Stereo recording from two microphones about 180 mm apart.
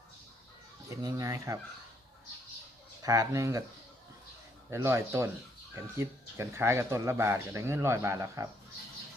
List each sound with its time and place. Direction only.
1.0 s speech: 20° right (ahead or behind)
3.0 s speech: 20° right (ahead or behind)
4.7 s speech: 15° right (ahead or behind)